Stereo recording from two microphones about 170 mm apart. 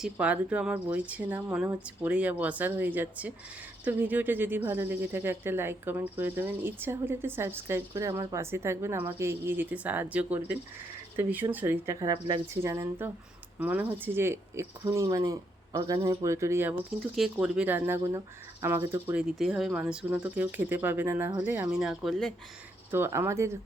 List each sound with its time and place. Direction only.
0.0 s a woman's voice: 10° right (ahead or behind)
11.9 s a woman's voice: 25° right (ahead or behind)
17.2 s a woman's voice: 5° right (ahead or behind)
19.4 s a woman's voice: centre (ahead or behind)
22.9 s a woman's voice: 15° right (ahead or behind)